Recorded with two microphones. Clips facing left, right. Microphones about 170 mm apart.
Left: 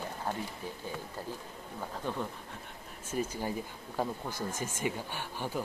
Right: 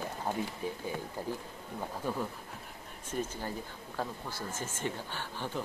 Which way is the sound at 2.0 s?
10° right (ahead or behind).